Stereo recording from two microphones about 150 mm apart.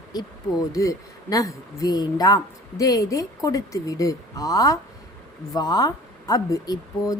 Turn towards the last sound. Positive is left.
turn(degrees=25)  # may be behind; listen again after turning